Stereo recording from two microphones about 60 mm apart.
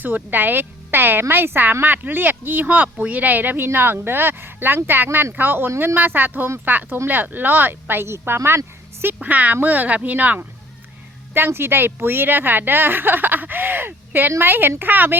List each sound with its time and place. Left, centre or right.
0.0 s speech: right
3.7 s speech: right
8.4 s a sound: right
9.2 s speech: right
11.3 s speech: right